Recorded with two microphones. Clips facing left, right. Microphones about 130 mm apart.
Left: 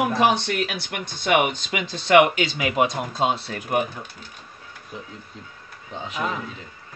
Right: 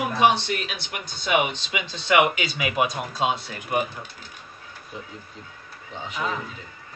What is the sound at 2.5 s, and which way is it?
Speech, 35° left (ahead or behind).